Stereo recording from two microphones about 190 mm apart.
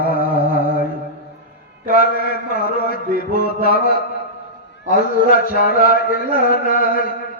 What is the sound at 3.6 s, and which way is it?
Speech, 55° left (ahead or behind).